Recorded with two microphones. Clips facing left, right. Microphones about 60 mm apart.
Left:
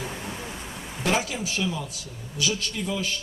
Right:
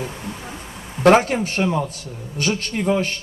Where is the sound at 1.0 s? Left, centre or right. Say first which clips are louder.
Right 12 dB; right.